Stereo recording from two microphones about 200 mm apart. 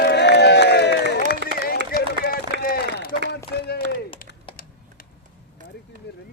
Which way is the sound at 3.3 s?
55° left (ahead or behind).